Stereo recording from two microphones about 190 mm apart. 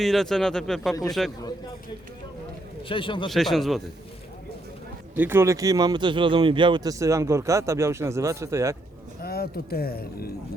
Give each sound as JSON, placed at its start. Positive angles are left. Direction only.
{"t": 0.0, "sound": "speech", "side_deg": 0}
{"t": 2.9, "sound": "a man's voice", "side_deg": 25}
{"t": 3.2, "sound": "speech", "side_deg": 0}
{"t": 5.1, "sound": "speech", "side_deg": -10}
{"t": 9.2, "sound": "speech", "side_deg": 55}